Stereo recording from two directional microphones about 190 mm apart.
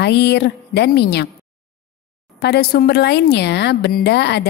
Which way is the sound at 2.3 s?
60° left (ahead or behind).